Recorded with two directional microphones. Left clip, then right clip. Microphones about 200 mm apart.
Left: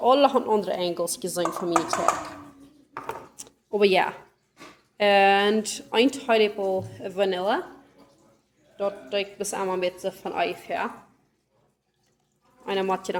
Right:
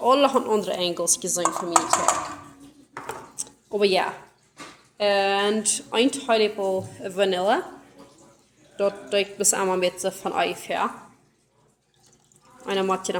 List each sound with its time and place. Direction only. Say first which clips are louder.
0.0 s a woman's voice: even; 5° left (ahead or behind)
1.2 s speech: right 2 dB; 20° left (ahead or behind)
2.9 s a sound: even; 15° left (ahead or behind)
4.9 s a woman's voice: left 3 dB; 30° left (ahead or behind); by 7.6 s centre (ahead or behind)
8.7 s a woman's voice: right 4 dB; 15° right (ahead or behind)
12.6 s speech: right 2 dB; centre (ahead or behind)